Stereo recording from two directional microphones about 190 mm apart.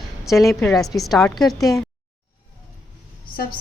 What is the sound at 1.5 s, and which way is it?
Speech, 15° left (ahead or behind).